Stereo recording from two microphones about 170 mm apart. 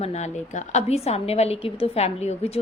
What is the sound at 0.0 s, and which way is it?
A woman's voice, 40° left (ahead or behind).